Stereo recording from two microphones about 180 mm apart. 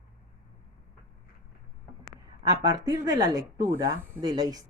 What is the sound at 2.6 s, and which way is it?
Speech, 20° right (ahead or behind).